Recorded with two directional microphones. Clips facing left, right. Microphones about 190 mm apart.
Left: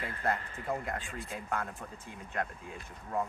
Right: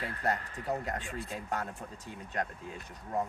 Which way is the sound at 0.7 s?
40° right (ahead or behind).